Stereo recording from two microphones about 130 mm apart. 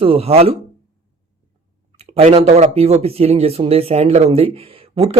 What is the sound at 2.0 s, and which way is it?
Speech, 50° right (ahead or behind).